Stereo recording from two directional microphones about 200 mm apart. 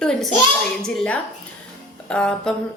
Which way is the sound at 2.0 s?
5° left (ahead or behind).